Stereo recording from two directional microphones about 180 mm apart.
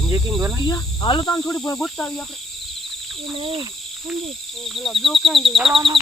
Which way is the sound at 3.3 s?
30° right (ahead or behind).